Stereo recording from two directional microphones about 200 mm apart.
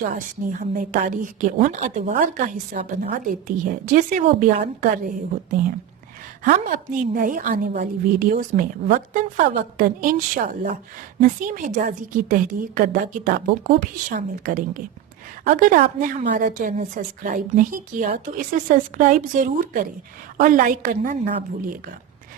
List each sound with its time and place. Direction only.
0.0 s a woman's voice: 40° right (ahead or behind)